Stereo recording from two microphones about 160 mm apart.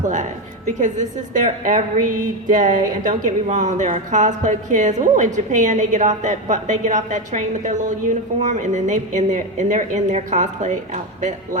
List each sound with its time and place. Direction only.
1.3 s a woman's voice: 50° right (ahead or behind)